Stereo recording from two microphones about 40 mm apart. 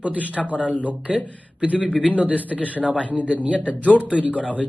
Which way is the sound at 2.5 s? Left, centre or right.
Left.